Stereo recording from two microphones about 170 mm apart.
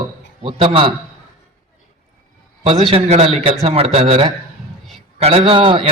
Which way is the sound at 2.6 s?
35° right (ahead or behind).